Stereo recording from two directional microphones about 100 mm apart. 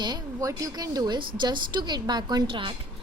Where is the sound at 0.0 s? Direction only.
40° right (ahead or behind).